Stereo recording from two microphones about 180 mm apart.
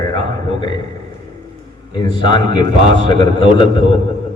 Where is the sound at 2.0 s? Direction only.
25° left (ahead or behind).